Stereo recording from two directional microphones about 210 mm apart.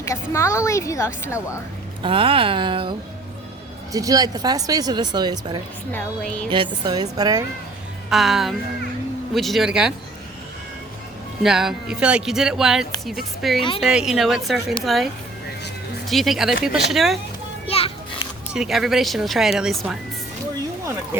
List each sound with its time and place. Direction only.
0.0 s a woman's voice: 15° left (ahead or behind)
2.0 s speech: 25° right (ahead or behind)
3.9 s speech: 15° right (ahead or behind)
5.9 s speech: 5° left (ahead or behind)
6.5 s speech: 20° right (ahead or behind)
8.1 s speech: centre (ahead or behind)
11.4 s speech: centre (ahead or behind)
17.7 s children playing: 25° left (ahead or behind)
18.5 s speech: centre (ahead or behind)